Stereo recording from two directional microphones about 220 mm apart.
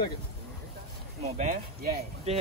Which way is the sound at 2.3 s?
30° right (ahead or behind).